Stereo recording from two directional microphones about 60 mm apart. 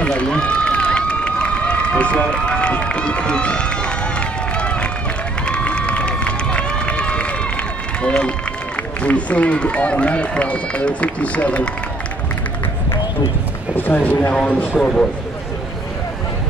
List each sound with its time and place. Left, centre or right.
0.0 s run: centre
8.0 s speech: centre
13.7 s speech: left
14.8 s speech: centre